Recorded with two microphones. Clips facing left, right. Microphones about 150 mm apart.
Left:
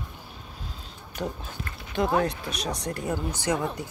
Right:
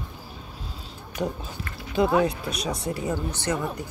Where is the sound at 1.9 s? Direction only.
10° right (ahead or behind).